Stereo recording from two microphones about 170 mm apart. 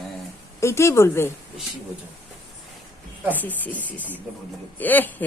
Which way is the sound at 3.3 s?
10° left (ahead or behind).